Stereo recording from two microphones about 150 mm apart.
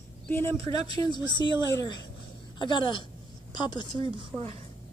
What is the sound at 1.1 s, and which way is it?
A woman's voice, 30° left (ahead or behind).